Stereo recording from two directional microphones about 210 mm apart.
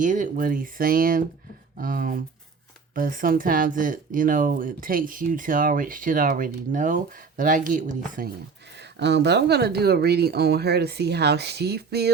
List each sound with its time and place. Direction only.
0.0 s speech: 40° right (ahead or behind)
8.7 s speech: 55° right (ahead or behind)